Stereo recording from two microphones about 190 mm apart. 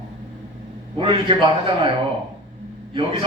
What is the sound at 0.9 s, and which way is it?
Speech, 25° right (ahead or behind).